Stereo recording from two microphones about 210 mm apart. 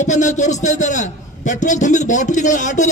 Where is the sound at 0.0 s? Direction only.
35° left (ahead or behind).